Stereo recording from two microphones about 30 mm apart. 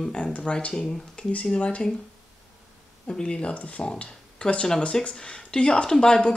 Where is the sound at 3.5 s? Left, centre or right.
Left.